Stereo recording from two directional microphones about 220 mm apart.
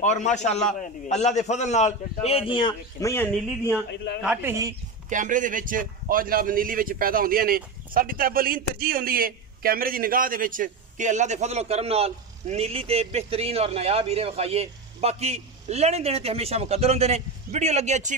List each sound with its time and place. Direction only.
0.0 s a man's voice: 30° left (ahead or behind); by 3.3 s 15° left (ahead or behind)
4.2 s a man's voice: 5° right (ahead or behind)
5.1 s speech: 35° right (ahead or behind)